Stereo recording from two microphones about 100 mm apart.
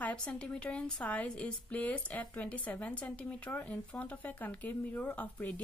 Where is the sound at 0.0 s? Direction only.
15° left (ahead or behind).